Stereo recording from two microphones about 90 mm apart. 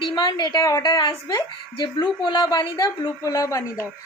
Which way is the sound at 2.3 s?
45° left (ahead or behind).